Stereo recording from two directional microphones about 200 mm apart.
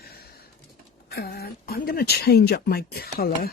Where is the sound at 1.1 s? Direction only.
50° left (ahead or behind).